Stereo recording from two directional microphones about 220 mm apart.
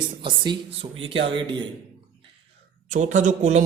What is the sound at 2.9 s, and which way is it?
Speech, 35° right (ahead or behind).